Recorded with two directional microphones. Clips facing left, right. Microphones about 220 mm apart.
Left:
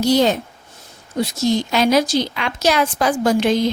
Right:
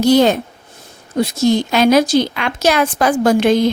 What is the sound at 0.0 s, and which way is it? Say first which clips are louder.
A woman's voice: right 4 dB; 55° right (ahead or behind).